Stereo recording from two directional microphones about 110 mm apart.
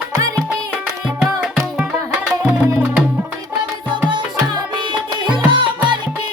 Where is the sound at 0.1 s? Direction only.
30° right (ahead or behind).